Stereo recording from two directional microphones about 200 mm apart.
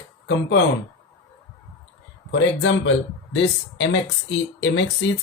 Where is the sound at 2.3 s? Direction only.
65° left (ahead or behind).